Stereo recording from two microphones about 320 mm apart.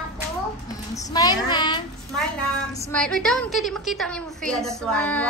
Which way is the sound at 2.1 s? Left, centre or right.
Centre.